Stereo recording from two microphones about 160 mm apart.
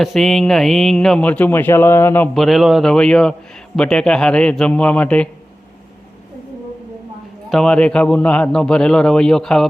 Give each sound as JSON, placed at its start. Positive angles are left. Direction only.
{"t": 0.0, "sound": "a man's voice", "side_deg": 0}
{"t": 7.5, "sound": "speech", "side_deg": 5}